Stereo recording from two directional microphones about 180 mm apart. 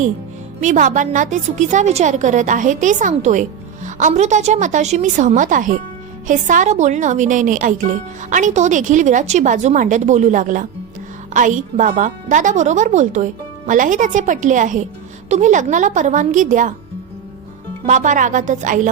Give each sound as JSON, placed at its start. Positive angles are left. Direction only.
{"t": 0.6, "sound": "speech", "side_deg": -45}
{"t": 17.8, "sound": "speech", "side_deg": -45}